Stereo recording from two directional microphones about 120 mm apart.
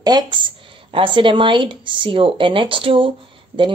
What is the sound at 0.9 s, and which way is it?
Speech, 45° right (ahead or behind).